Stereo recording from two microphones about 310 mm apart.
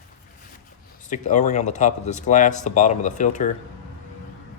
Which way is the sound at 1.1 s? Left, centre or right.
Left.